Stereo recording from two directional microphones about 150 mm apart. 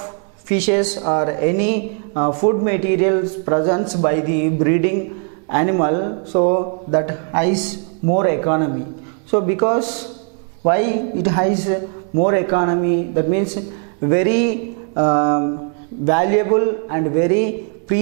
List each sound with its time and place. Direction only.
0.5 s speech: 5° right (ahead or behind)